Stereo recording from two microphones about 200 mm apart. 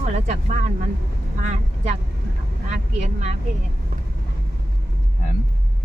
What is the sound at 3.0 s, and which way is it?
Speech, 35° right (ahead or behind).